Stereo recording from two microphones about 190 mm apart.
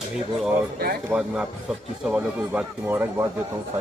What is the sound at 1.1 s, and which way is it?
A man's voice, 5° right (ahead or behind).